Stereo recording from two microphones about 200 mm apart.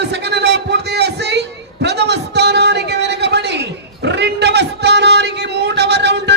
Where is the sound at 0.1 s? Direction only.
60° right (ahead or behind).